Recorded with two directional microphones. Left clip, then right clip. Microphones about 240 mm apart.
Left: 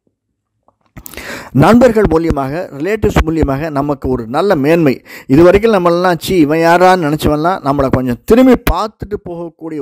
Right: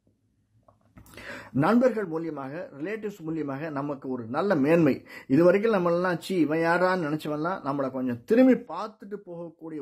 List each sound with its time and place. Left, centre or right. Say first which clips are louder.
0.9 s a man's voice: left 15 dB; left